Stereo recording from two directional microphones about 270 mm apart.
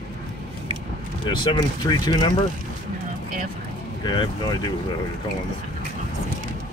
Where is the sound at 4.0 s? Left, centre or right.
Centre.